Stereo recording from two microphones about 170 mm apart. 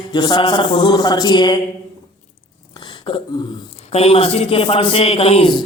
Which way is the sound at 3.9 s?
35° left (ahead or behind).